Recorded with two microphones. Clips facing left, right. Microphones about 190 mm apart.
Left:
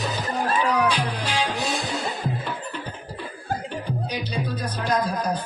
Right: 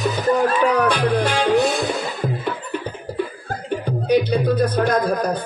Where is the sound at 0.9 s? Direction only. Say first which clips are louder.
Right 7 dB; 55° right (ahead or behind).